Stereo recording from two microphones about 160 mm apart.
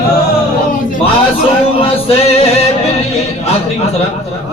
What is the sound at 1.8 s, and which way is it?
Music, 40° left (ahead or behind).